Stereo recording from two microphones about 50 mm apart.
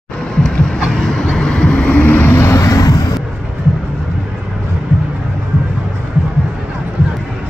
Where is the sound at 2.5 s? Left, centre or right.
Left.